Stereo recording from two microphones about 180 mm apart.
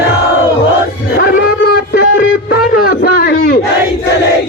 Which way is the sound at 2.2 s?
55° left (ahead or behind).